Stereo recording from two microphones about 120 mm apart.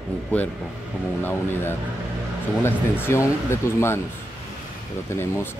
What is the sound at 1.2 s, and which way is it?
Speech, 20° left (ahead or behind).